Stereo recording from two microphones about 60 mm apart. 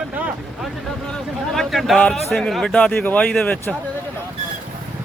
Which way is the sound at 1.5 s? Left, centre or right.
Centre.